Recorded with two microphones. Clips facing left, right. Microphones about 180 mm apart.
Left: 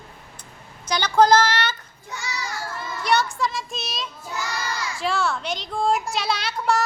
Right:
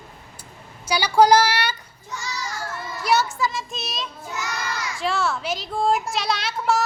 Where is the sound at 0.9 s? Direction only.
10° right (ahead or behind).